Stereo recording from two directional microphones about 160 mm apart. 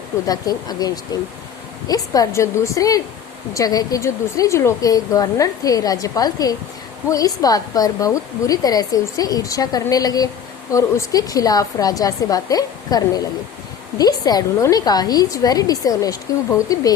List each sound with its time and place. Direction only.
0.3 s speech: 25° left (ahead or behind)